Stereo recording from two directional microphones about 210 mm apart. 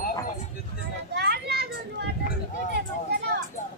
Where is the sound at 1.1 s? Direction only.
50° right (ahead or behind).